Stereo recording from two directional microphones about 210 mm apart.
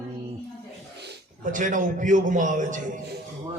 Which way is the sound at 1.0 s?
50° right (ahead or behind).